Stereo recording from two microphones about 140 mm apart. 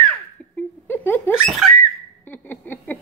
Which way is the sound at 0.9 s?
15° left (ahead or behind).